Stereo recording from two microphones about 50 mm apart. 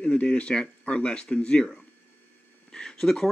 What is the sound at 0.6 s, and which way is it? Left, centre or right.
Speech, centre.